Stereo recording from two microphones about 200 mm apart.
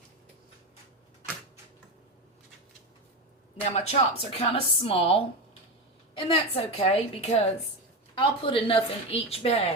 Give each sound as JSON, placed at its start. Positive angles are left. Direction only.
{"t": 3.7, "sound": "a woman's voice", "side_deg": 30}